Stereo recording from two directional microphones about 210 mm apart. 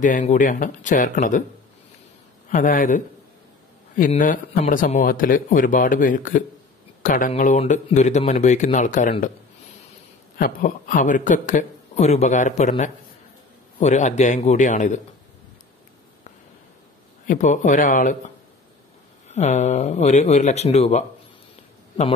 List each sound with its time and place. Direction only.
0.0 s a man's voice: 35° left (ahead or behind)
2.5 s a man's voice: 40° left (ahead or behind)
10.3 s a man's voice: 40° left (ahead or behind)
17.3 s a man's voice: 35° left (ahead or behind)
19.2 s a man's voice: 35° left (ahead or behind)